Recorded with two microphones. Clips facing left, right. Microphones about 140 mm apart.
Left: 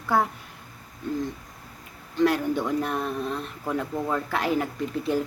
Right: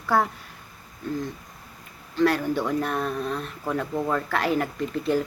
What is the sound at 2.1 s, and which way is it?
A woman's voice, 15° left (ahead or behind).